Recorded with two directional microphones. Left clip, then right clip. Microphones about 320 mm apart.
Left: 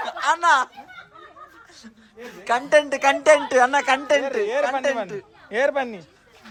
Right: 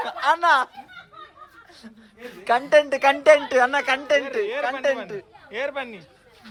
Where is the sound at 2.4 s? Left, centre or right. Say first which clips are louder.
Right 1 dB; centre.